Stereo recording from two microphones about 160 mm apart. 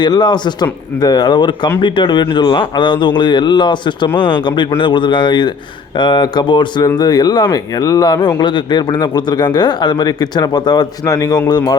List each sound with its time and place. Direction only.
0.0 s a man's voice: 25° left (ahead or behind)